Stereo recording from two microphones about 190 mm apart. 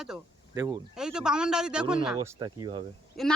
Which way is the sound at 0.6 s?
20° right (ahead or behind).